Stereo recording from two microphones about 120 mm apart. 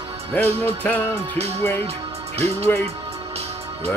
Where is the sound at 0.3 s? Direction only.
15° left (ahead or behind).